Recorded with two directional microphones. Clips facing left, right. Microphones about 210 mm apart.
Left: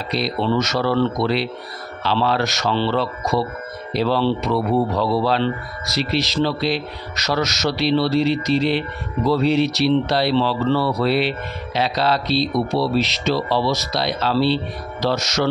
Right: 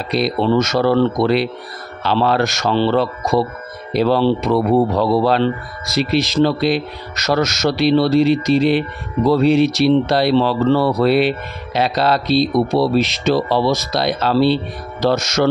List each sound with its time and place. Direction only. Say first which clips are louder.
0.1 s speech: right 5 dB; 50° right (ahead or behind)